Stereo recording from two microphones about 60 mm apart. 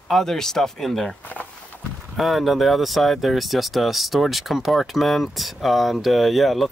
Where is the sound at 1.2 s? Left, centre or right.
Left.